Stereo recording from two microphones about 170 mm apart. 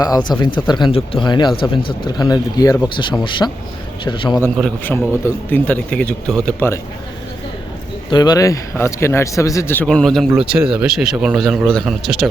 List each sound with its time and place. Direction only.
0.0 s speech: 25° left (ahead or behind)
4.8 s a man's voice: 10° left (ahead or behind)
8.1 s a man's voice: 25° left (ahead or behind); by 12.3 s centre (ahead or behind)